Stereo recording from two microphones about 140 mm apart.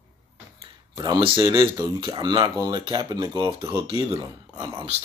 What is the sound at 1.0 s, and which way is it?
Speech, 35° right (ahead or behind).